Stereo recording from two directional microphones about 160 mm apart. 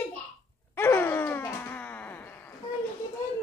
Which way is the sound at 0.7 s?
15° left (ahead or behind).